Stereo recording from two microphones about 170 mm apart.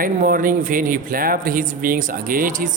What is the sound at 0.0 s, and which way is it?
Speech, 55° right (ahead or behind).